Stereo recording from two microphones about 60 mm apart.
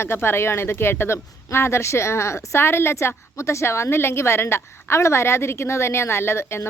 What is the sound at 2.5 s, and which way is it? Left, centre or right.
A woman's voice, left.